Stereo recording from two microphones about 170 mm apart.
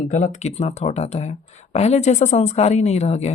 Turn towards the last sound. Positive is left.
turn(degrees=40)  # may be behind; listen again after turning